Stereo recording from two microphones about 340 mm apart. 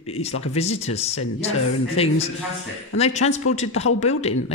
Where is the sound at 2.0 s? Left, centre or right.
Centre.